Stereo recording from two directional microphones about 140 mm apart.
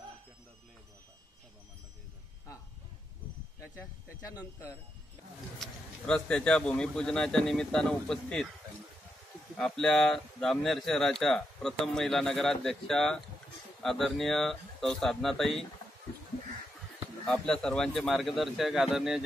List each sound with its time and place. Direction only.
4.2 s speech: 25° left (ahead or behind)
5.6 s speech: 5° left (ahead or behind)
9.6 s speech: 5° left (ahead or behind)
17.3 s speech: 5° left (ahead or behind)